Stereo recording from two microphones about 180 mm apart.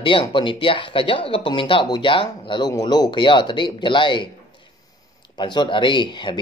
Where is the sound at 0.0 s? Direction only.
30° left (ahead or behind).